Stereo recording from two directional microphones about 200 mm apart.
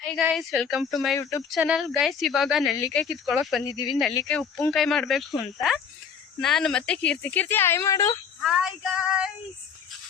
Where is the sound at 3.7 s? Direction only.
20° left (ahead or behind).